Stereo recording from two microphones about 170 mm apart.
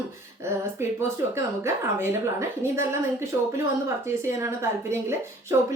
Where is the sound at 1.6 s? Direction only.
15° right (ahead or behind).